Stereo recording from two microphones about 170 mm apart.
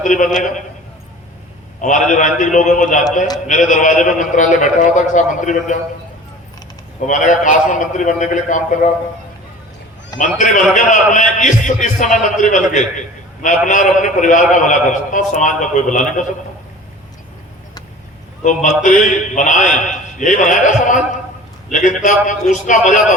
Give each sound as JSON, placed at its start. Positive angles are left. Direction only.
{"t": 0.0, "sound": "a man's voice", "side_deg": 50}
{"t": 1.8, "sound": "a man's voice", "side_deg": 50}
{"t": 7.1, "sound": "a man's voice", "side_deg": 50}
{"t": 10.2, "sound": "a man's voice", "side_deg": 50}
{"t": 18.4, "sound": "a man's voice", "side_deg": 50}